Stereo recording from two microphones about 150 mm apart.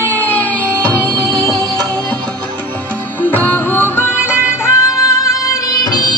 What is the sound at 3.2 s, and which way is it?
Music, 10° left (ahead or behind).